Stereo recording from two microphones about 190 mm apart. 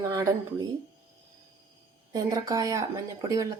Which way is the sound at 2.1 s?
20° right (ahead or behind).